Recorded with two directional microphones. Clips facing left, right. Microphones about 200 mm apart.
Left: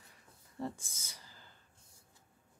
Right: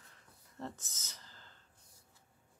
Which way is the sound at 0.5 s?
10° left (ahead or behind).